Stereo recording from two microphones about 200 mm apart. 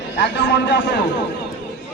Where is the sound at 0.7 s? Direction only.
60° left (ahead or behind).